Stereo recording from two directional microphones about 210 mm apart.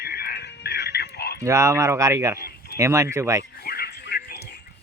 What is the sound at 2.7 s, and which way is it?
Speech, 15° right (ahead or behind).